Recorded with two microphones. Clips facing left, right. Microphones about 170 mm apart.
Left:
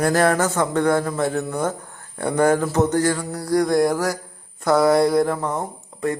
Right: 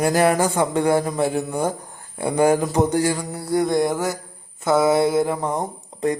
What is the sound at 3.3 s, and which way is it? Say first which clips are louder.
Music: left 2 dB; 25° right (ahead or behind).